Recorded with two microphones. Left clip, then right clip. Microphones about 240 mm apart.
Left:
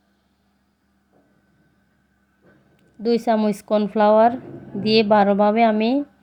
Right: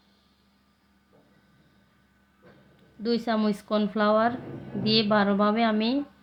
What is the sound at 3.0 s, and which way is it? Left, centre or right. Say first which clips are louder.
Speech: left 7 dB; left.